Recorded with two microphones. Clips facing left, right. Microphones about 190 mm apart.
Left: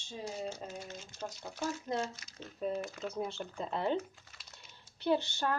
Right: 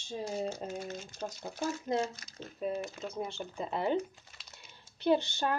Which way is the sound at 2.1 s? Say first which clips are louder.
Right 3 dB; 45° right (ahead or behind).